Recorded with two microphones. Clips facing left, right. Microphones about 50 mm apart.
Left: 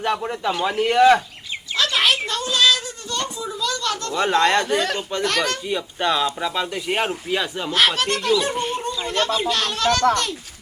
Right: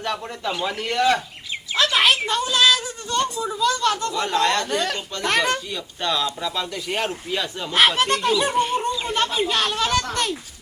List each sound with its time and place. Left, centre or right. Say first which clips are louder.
0.0 s a man's voice: left 4 dB; centre
1.7 s a child's voice: right 1 dB; centre
4.1 s speech: left 3 dB; left
5.1 s speech: right 2 dB; left
7.7 s speech: right 2 dB; centre